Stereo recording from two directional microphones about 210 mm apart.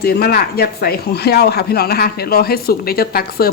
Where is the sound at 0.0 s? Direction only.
50° left (ahead or behind).